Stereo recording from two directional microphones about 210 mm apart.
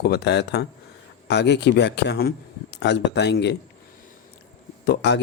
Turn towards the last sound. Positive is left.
turn(degrees=55)  # may be behind; listen again after turning